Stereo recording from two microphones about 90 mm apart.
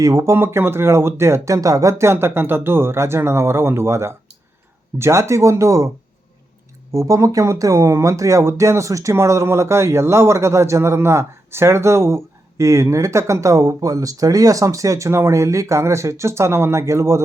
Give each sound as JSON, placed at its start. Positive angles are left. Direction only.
{"t": 0.0, "sound": "speech", "side_deg": -40}
{"t": 0.3, "sound": "speech", "side_deg": -25}
{"t": 6.9, "sound": "speech", "side_deg": -35}